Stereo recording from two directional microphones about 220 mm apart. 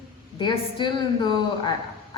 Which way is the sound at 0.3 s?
20° left (ahead or behind).